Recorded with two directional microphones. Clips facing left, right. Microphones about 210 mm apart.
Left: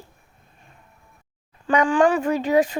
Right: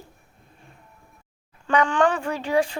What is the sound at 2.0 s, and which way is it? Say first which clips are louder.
Speech: left 4 dB; 15° left (ahead or behind).